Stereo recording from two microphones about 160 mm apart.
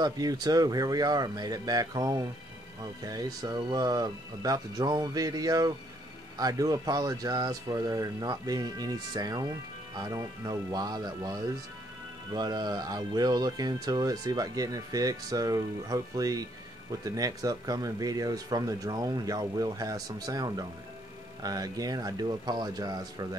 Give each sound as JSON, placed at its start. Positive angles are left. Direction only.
{"t": 0.0, "sound": "speech", "side_deg": -25}